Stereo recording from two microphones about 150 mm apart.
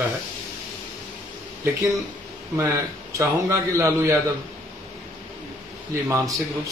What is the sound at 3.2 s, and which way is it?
Speech, 20° right (ahead or behind).